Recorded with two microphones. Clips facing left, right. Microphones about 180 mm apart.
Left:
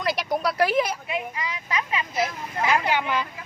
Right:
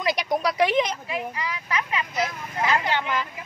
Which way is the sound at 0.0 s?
Centre (ahead or behind).